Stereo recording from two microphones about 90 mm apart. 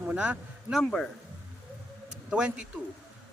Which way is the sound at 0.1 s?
15° right (ahead or behind).